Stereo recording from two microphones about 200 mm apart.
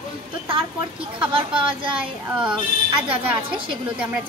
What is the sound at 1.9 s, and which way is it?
Speech, 5° right (ahead or behind).